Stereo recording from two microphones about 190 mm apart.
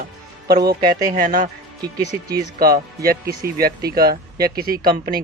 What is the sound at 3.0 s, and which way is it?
Speech, 55° right (ahead or behind).